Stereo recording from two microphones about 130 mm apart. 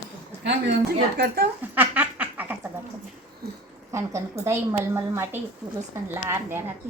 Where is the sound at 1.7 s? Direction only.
15° right (ahead or behind).